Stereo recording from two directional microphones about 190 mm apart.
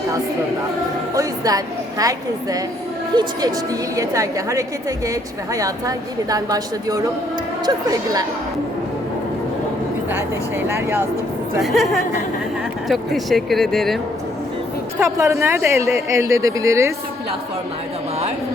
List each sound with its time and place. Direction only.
1.1 s a woman's voice: 20° right (ahead or behind)
3.9 s a woman's voice: 15° right (ahead or behind)
10.7 s speech: 15° right (ahead or behind)
11.6 s speech: centre (ahead or behind)
14.9 s speech: 15° right (ahead or behind)